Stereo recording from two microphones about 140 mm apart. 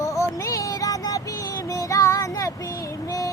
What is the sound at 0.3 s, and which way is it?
Music, 25° left (ahead or behind).